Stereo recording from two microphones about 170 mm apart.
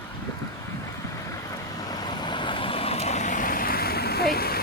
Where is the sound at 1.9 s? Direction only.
25° left (ahead or behind).